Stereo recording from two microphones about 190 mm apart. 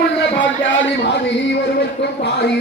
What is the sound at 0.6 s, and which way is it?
A man's voice, 75° left (ahead or behind).